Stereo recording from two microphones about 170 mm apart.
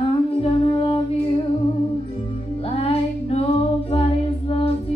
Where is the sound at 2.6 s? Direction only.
35° left (ahead or behind).